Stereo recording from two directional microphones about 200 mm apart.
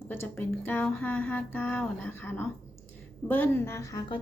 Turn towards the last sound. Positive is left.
turn(degrees=15)  # may be behind; listen again after turning